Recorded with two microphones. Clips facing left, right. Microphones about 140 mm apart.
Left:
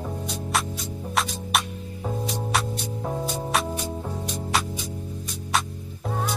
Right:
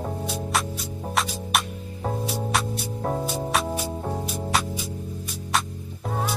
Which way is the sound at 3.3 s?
5° right (ahead or behind).